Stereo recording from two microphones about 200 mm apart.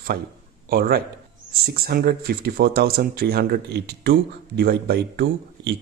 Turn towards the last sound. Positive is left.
turn(degrees=-55)  # may be behind; listen again after turning